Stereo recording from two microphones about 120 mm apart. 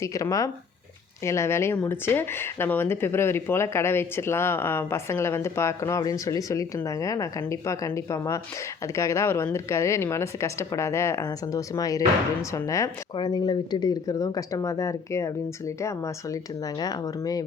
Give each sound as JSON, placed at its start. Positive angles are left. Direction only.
{"t": 0.0, "sound": "speech", "side_deg": 25}